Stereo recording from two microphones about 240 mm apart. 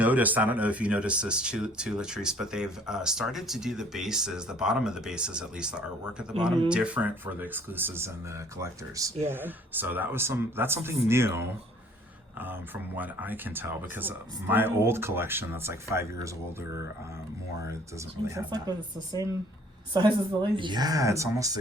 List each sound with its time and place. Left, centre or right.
0.0 s speech: centre
18.3 s speech: centre